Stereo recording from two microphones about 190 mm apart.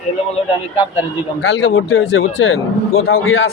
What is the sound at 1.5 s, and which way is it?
A man's voice, 90° left.